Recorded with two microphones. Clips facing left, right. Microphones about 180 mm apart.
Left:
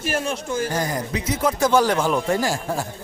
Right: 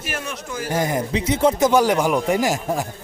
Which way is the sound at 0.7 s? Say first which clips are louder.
Right 3 dB; 20° right (ahead or behind).